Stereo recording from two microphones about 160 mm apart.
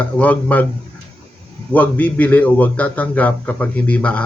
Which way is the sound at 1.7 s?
10° left (ahead or behind).